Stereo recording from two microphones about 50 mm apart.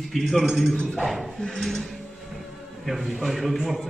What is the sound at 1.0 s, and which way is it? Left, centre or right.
Speech, centre.